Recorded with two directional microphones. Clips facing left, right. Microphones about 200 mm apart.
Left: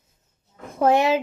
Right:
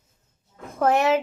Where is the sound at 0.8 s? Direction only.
10° left (ahead or behind).